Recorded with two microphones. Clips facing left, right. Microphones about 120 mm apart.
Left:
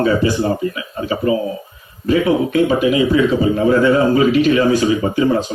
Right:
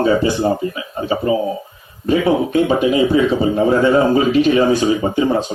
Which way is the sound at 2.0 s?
25° right (ahead or behind).